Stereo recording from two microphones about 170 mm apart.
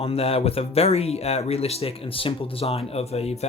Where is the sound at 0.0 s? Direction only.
35° left (ahead or behind).